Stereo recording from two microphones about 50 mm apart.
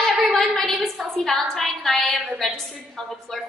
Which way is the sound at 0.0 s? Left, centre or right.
Centre.